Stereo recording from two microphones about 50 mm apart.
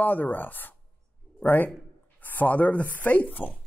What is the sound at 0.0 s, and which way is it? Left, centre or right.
Speech, left.